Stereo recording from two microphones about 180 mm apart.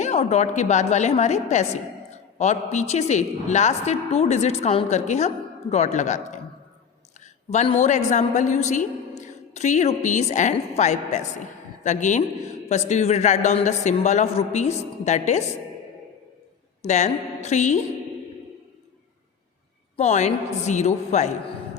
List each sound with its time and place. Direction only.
0.0 s a woman's voice: 40° left (ahead or behind)
7.5 s a woman's voice: 40° left (ahead or behind)
16.8 s a woman's voice: 40° left (ahead or behind)
20.0 s a woman's voice: 40° left (ahead or behind)